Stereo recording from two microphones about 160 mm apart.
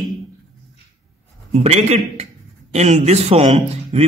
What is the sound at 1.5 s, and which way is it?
A man's voice, 45° right (ahead or behind).